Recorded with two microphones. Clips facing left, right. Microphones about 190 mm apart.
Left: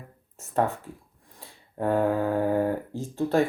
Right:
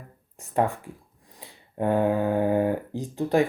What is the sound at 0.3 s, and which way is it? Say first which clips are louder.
Speech: right 1 dB; 15° right (ahead or behind).